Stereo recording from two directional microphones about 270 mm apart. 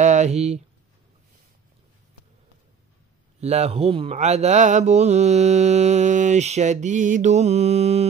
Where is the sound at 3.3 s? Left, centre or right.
Right.